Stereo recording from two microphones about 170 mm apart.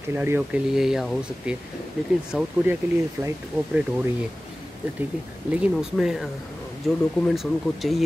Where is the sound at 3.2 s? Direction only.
20° right (ahead or behind).